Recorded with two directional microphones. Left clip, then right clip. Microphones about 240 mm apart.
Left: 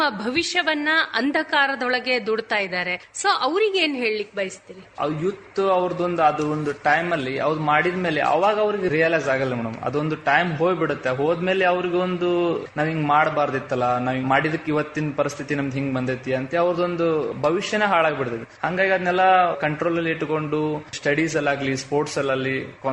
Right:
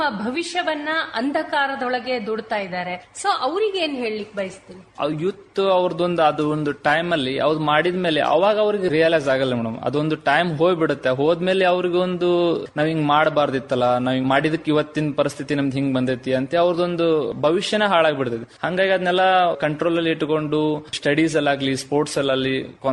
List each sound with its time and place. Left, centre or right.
0.0 s a woman's voice: left
5.5 s a man's voice: right